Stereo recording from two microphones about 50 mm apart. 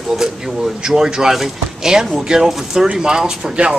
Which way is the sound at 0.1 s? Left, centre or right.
Centre.